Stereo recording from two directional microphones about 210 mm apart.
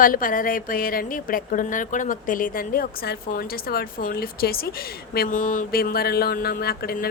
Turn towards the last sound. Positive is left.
turn(degrees=45)  # may be behind; listen again after turning